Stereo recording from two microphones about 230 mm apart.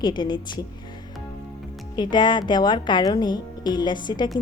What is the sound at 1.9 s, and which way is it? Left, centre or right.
A woman's voice, centre.